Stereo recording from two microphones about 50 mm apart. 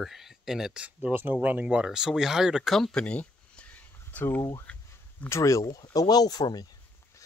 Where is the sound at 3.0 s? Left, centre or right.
Left.